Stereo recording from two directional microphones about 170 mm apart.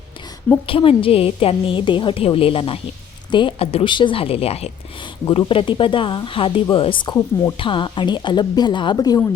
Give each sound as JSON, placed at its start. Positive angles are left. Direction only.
{"t": 0.7, "sound": "a woman's voice", "side_deg": 30}